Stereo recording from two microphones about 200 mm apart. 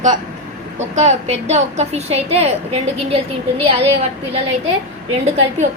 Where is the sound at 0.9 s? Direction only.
35° right (ahead or behind).